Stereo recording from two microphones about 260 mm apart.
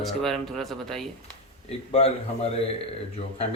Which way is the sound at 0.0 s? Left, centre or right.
Centre.